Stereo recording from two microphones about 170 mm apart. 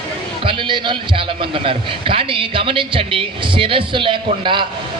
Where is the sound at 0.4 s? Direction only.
30° right (ahead or behind).